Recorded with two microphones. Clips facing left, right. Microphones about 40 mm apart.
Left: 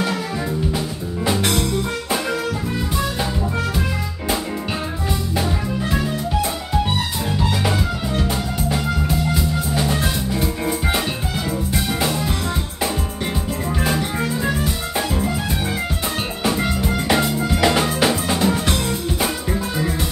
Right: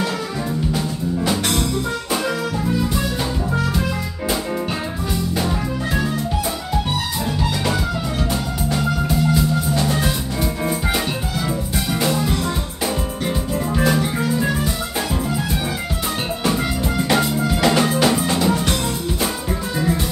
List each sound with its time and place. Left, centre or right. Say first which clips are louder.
0.7 s music: right 3 dB; centre
5.4 s music: even; centre
9.3 s music: right 3 dB; centre
12.1 s music: right 2 dB; centre
13.8 s music: right 2 dB; centre
16.4 s music: left 1 dB; centre